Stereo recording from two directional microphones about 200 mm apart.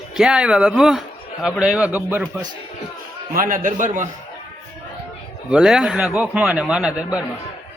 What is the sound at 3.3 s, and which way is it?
Speech, 45° right (ahead or behind).